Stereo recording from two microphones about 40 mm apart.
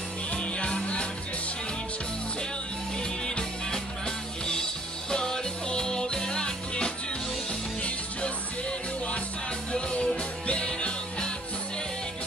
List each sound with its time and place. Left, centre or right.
0.3 s music: left
3.3 s music: left
5.1 s music: centre